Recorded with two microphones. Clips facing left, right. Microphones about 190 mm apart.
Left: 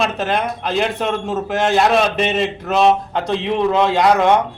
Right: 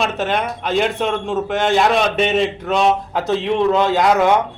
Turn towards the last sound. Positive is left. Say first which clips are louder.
# left 1 dB
turn(degrees=0)  # may be behind; listen again after turning